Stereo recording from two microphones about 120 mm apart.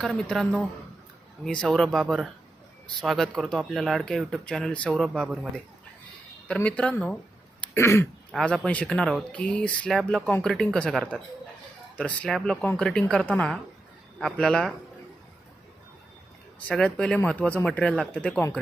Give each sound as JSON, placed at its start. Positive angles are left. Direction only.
{"t": 0.0, "sound": "speech", "side_deg": 5}
{"t": 6.5, "sound": "speech", "side_deg": 10}
{"t": 7.6, "sound": "throat clearing", "side_deg": 20}
{"t": 8.5, "sound": "speech", "side_deg": 10}
{"t": 16.6, "sound": "speech", "side_deg": 5}